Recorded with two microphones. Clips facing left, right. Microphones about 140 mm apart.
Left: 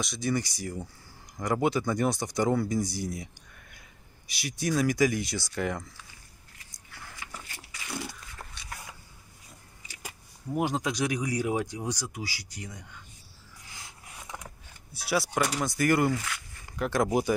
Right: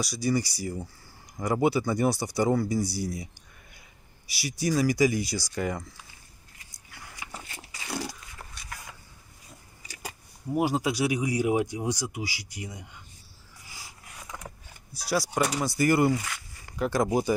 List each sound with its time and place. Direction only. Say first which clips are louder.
0.0 s speech: right 3 dB; 5° right (ahead or behind)
4.3 s speech: right 2 dB; 5° right (ahead or behind)
7.9 s a sound: right 3 dB; 35° right (ahead or behind)
10.5 s speech: right 3 dB; 5° right (ahead or behind)
13.7 s a sound: right 1 dB; centre (ahead or behind)
15.0 s speech: right 1 dB; centre (ahead or behind)